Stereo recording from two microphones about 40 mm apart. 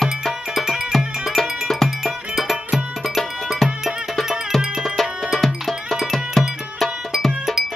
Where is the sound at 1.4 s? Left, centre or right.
Centre.